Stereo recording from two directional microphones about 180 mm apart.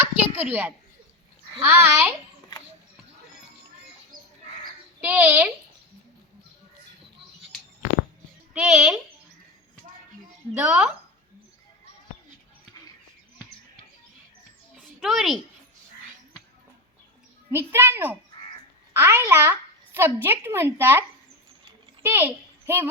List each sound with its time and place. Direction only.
0.0 s a sound: 10° right (ahead or behind)
1.6 s a child's voice: 10° right (ahead or behind)
4.1 s chicken: 50° right (ahead or behind)
4.9 s a child's voice: 10° right (ahead or behind)
8.5 s speech: 5° right (ahead or behind)
10.5 s a child's voice: 5° right (ahead or behind)
15.0 s speech: centre (ahead or behind)
17.5 s a child's voice: 10° right (ahead or behind)
22.0 s a child's voice: 10° right (ahead or behind)